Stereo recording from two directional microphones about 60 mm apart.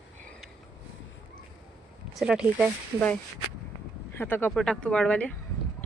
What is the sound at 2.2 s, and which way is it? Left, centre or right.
Speech, centre.